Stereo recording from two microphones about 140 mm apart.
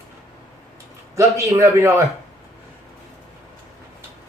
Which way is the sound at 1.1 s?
20° right (ahead or behind).